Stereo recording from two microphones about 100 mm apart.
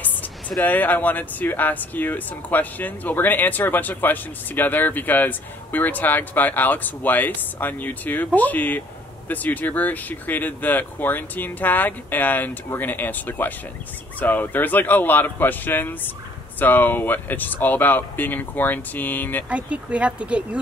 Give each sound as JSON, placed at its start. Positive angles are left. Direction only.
{"t": 0.0, "sound": "speech", "side_deg": 15}
{"t": 19.5, "sound": "speech", "side_deg": -10}